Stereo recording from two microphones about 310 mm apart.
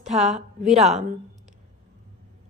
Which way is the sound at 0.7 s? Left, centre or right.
Right.